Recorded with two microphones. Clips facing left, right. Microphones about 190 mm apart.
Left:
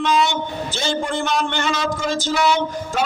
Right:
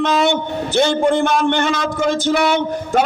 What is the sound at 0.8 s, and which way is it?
A man's voice, 60° right (ahead or behind).